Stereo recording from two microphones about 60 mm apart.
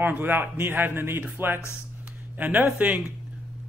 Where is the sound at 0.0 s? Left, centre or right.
Right.